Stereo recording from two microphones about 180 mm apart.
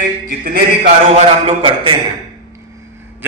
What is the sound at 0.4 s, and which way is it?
Speech, 50° right (ahead or behind).